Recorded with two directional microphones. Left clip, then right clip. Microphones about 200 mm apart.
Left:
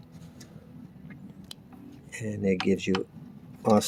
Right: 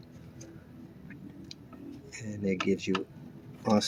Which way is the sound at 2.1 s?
40° left (ahead or behind).